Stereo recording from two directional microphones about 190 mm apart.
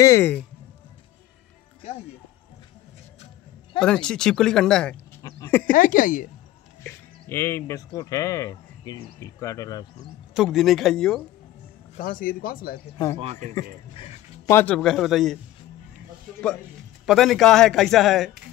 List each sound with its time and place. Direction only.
0.0 s speech: 15° left (ahead or behind)
3.8 s a man's voice: 5° left (ahead or behind)
5.7 s speech: 45° left (ahead or behind)
6.8 s speech: 10° left (ahead or behind)
10.3 s a man's voice: centre (ahead or behind)
12.0 s speech: 45° left (ahead or behind)
12.9 s speech: 15° left (ahead or behind)
13.2 s a man's voice: 35° right (ahead or behind)
14.4 s a man's voice: 10° left (ahead or behind)
17.0 s a man's voice: centre (ahead or behind)